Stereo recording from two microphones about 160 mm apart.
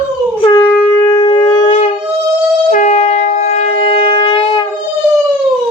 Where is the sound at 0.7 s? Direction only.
15° left (ahead or behind).